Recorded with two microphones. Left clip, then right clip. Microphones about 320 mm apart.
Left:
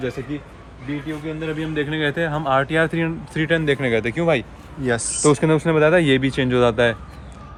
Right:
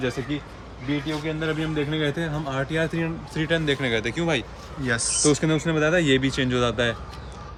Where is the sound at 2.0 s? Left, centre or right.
Centre.